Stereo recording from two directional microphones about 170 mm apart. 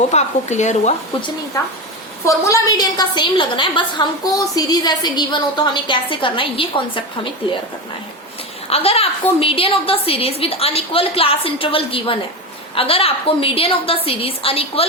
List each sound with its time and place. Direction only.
0.1 s speech: 45° left (ahead or behind)
2.2 s a woman's voice: 20° left (ahead or behind)
8.7 s a woman's voice: 35° left (ahead or behind)